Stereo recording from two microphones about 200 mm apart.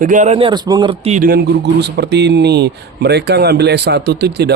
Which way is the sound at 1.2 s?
55° right (ahead or behind).